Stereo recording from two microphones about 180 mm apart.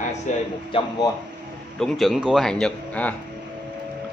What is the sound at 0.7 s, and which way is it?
Speech, 30° left (ahead or behind).